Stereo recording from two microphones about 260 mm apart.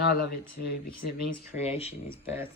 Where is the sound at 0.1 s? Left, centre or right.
Left.